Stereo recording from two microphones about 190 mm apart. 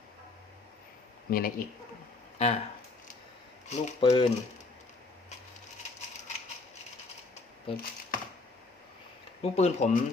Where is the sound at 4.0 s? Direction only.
25° left (ahead or behind).